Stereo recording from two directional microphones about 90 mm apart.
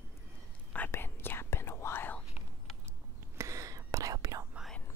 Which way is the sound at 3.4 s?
35° right (ahead or behind).